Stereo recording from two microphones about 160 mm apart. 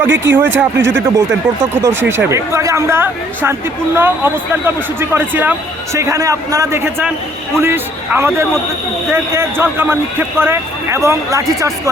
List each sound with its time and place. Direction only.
0.0 s speech: 15° right (ahead or behind)